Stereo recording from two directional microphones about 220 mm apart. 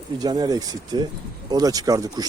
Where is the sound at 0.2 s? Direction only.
15° right (ahead or behind).